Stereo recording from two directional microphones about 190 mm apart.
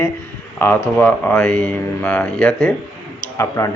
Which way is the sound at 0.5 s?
10° left (ahead or behind).